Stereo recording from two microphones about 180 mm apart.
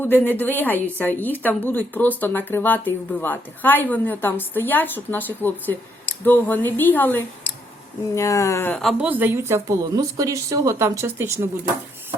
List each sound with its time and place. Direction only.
0.0 s speech: 10° left (ahead or behind); by 11.4 s 15° right (ahead or behind)